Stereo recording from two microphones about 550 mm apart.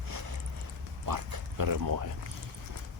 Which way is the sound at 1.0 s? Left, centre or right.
Right.